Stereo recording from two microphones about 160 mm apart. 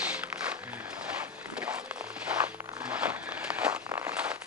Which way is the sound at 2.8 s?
10° right (ahead or behind).